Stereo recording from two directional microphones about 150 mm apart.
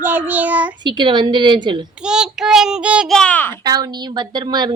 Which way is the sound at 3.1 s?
10° left (ahead or behind).